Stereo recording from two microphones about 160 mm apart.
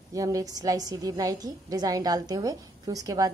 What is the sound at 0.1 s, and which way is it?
A woman's voice, 20° right (ahead or behind).